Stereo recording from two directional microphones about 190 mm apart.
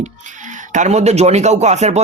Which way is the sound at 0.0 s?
40° right (ahead or behind).